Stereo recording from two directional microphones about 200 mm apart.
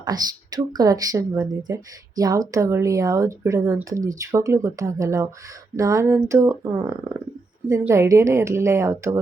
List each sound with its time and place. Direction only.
0.0 s speech: 20° right (ahead or behind)